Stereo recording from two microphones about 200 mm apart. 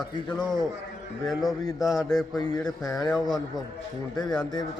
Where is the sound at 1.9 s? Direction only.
Centre (ahead or behind).